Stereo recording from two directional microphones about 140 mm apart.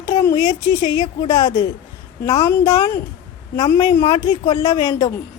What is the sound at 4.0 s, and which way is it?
Speech, 40° left (ahead or behind).